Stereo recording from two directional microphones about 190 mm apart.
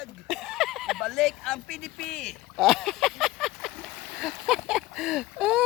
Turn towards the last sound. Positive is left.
turn(degrees=0)  # may be behind; listen again after turning